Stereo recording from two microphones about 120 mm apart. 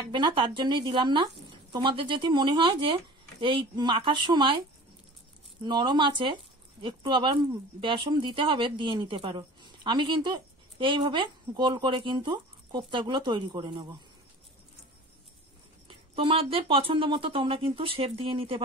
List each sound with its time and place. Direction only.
0.1 s speech: 45° right (ahead or behind)
5.6 s speech: 40° right (ahead or behind)
15.9 s speech: 50° right (ahead or behind)